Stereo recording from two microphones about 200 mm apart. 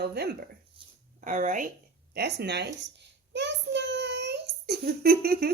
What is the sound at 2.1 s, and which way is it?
A woman's voice, 55° right (ahead or behind).